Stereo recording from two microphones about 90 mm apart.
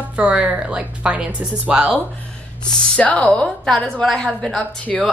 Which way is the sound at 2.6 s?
15° left (ahead or behind).